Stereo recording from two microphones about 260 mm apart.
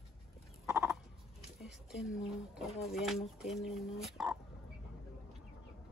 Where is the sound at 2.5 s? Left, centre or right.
Centre.